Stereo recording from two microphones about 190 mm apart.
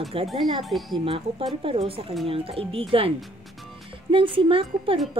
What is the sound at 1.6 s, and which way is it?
Speech, 30° right (ahead or behind).